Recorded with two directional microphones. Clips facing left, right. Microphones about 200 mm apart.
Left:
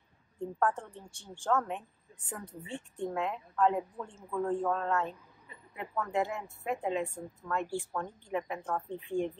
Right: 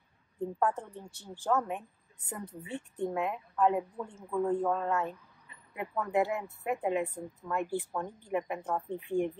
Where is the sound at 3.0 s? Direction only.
5° right (ahead or behind).